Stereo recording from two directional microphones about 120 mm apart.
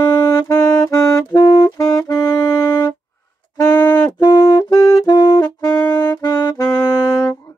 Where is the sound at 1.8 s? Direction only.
30° left (ahead or behind).